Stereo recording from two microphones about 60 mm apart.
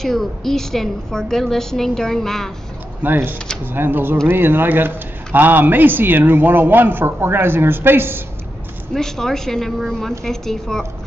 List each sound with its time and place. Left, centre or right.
0.0 s a woman's voice: centre
3.0 s speech: right
8.9 s a woman's voice: centre